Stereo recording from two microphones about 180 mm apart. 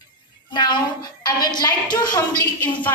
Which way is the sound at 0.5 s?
25° left (ahead or behind).